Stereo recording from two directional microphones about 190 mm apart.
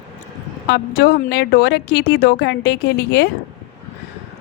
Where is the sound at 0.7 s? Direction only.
60° left (ahead or behind).